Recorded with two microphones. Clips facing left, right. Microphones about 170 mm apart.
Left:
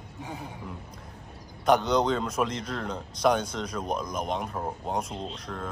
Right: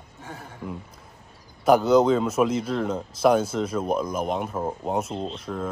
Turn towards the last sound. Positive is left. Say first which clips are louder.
# right 6 dB
turn(degrees=-5)  # may be behind; listen again after turning